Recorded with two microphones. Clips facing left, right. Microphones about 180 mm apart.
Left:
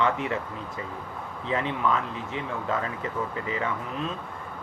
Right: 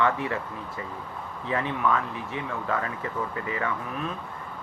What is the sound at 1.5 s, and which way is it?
Speech, 20° left (ahead or behind).